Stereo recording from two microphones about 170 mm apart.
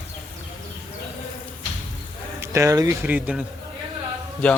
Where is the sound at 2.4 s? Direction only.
15° right (ahead or behind).